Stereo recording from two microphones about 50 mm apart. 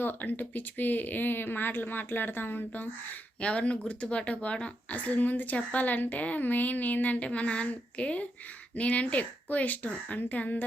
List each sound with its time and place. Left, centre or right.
0.2 s speech: left
3.4 s a woman's voice: left